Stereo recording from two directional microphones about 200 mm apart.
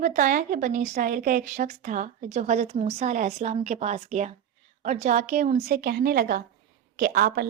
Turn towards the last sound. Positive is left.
turn(degrees=-45)  # may be behind; listen again after turning